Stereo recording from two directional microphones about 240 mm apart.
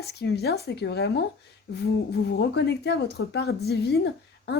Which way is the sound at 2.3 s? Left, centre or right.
Left.